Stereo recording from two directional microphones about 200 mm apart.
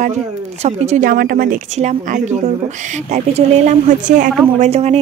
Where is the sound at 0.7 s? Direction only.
35° right (ahead or behind).